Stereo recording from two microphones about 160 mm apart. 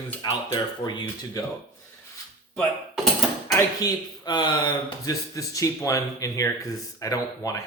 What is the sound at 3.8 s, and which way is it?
Speech, 25° left (ahead or behind).